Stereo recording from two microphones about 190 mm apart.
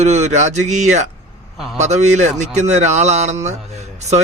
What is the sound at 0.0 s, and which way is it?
Speech, 35° right (ahead or behind).